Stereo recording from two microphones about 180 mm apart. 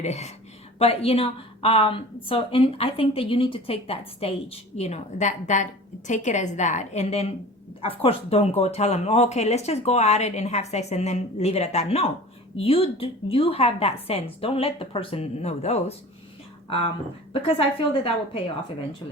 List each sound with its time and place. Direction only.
0.0 s a woman's voice: 40° left (ahead or behind)